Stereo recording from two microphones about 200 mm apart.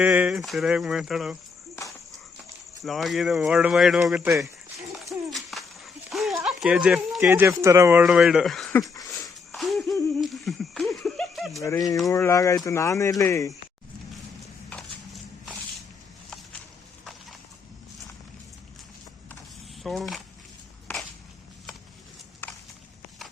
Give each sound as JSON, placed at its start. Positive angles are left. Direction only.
{"t": 0.0, "sound": "speech", "side_deg": -5}
{"t": 2.8, "sound": "speech", "side_deg": 0}
{"t": 5.0, "sound": "a sound", "side_deg": 0}
{"t": 6.4, "sound": "speech", "side_deg": -5}
{"t": 9.0, "sound": "dog", "side_deg": 15}
{"t": 9.5, "sound": "hoot", "side_deg": 0}
{"t": 10.1, "sound": "a sound", "side_deg": 0}
{"t": 11.6, "sound": "speech", "side_deg": 15}
{"t": 14.7, "sound": "a sound", "side_deg": 5}
{"t": 19.8, "sound": "speech", "side_deg": 0}